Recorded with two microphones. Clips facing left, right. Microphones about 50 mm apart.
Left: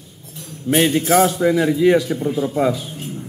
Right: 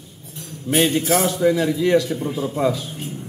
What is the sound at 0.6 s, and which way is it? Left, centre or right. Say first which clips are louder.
Speech: left 2 dB; centre.